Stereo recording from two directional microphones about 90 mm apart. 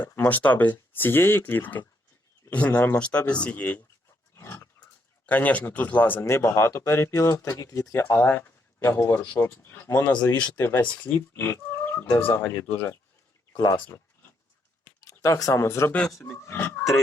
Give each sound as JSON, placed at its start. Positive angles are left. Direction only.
{"t": 0.1, "sound": "speech", "side_deg": 20}
{"t": 4.4, "sound": "a sound", "side_deg": 25}
{"t": 5.2, "sound": "speech", "side_deg": 15}
{"t": 6.1, "sound": "speech", "side_deg": 30}
{"t": 15.2, "sound": "speech", "side_deg": 40}